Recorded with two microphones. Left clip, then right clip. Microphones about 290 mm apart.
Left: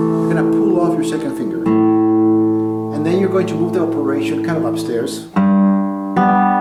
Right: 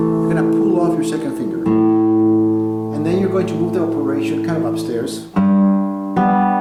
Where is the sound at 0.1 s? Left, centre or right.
Centre.